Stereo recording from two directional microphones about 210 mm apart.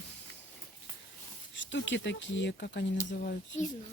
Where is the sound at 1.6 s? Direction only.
60° left (ahead or behind).